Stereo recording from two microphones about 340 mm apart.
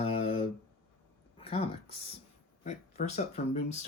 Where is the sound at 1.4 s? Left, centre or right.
Centre.